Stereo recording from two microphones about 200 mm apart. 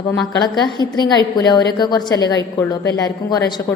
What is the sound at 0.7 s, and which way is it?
A woman's voice, 20° left (ahead or behind).